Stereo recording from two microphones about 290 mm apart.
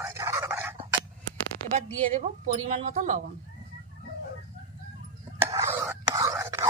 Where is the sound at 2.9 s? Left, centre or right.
Right.